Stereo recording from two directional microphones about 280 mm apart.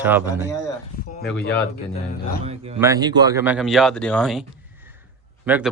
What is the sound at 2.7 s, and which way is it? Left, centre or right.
Speech, centre.